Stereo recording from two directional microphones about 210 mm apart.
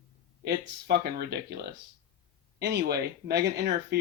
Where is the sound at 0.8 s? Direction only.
50° right (ahead or behind).